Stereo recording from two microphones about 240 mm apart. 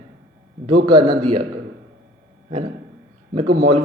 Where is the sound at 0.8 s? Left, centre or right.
Centre.